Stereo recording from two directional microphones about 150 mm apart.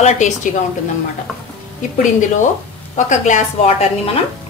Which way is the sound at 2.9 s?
50° left (ahead or behind).